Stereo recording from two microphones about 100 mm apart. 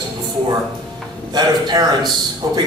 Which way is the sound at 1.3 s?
45° right (ahead or behind).